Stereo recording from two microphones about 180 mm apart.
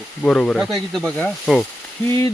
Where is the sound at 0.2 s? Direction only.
5° left (ahead or behind).